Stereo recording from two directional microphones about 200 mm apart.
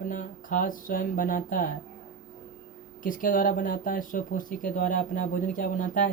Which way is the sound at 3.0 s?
40° left (ahead or behind).